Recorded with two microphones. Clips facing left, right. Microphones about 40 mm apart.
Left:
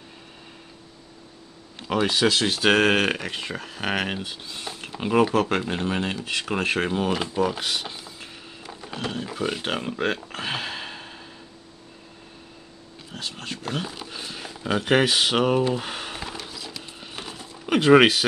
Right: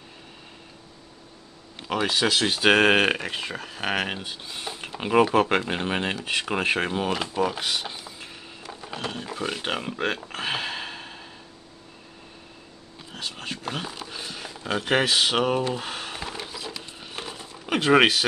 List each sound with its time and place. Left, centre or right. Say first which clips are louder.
1.9 s speech: left 2 dB; centre; by 6.1 s right
6.4 s speech: left 1 dB; centre
13.1 s speech: even; centre
16.3 s a sound: right 1 dB; centre